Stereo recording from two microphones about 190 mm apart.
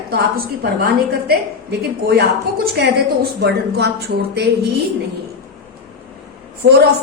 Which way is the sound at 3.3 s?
60° right (ahead or behind).